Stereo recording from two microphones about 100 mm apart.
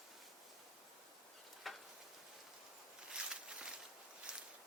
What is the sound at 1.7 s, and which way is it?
Tick-tock, centre (ahead or behind).